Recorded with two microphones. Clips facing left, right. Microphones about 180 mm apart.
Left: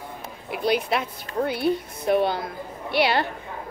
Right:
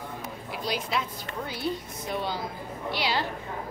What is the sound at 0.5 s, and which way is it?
A woman's voice, 60° left (ahead or behind).